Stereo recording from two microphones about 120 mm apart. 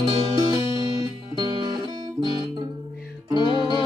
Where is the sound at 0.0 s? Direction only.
50° right (ahead or behind).